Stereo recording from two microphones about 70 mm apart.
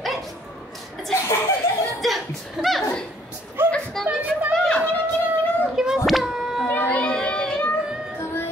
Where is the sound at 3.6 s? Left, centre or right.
Right.